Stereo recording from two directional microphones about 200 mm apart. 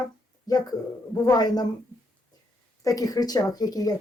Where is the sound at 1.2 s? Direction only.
20° left (ahead or behind).